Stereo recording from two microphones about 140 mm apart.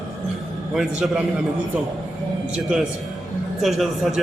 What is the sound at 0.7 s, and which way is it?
Speech, 5° right (ahead or behind).